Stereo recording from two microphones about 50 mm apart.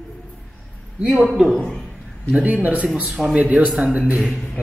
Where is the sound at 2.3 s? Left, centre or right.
Right.